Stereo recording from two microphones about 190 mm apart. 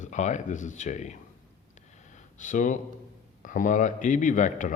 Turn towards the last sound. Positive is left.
turn(degrees=40)  # may be behind; listen again after turning